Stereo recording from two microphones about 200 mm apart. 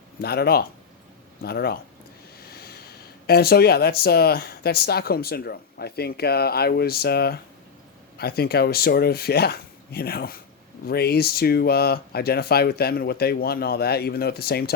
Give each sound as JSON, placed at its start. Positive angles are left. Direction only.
{"t": 0.2, "sound": "speech", "side_deg": 50}